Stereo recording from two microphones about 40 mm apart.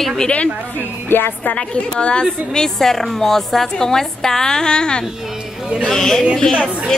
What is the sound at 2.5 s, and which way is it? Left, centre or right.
A woman's voice, centre.